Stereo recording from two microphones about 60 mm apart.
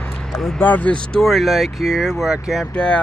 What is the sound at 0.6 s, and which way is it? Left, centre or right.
Speech, left.